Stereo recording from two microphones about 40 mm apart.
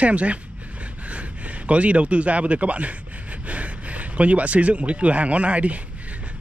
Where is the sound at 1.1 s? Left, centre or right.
Right.